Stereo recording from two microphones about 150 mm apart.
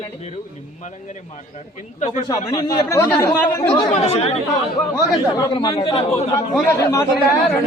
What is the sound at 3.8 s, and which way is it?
Speech, 40° left (ahead or behind).